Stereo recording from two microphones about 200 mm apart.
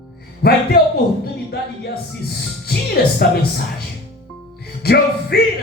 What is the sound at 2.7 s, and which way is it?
Speech, 50° left (ahead or behind).